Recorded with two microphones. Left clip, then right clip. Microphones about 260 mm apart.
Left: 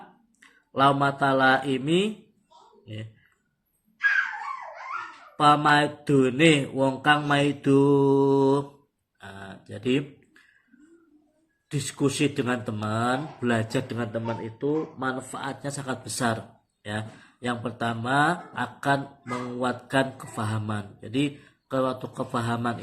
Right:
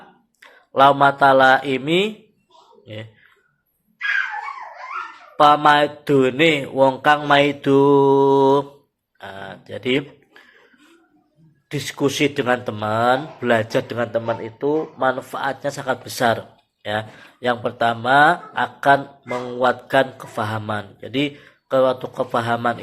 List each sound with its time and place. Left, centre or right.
0.3 s speech: left
5.4 s mantra: left
9.1 s a sound: left
11.7 s mantra: left